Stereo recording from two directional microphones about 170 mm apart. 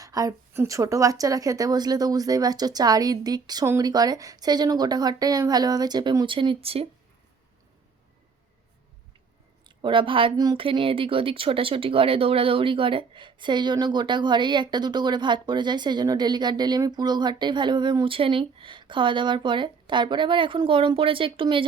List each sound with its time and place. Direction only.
0.0 s speech: 20° right (ahead or behind)
9.6 s speech: 30° right (ahead or behind)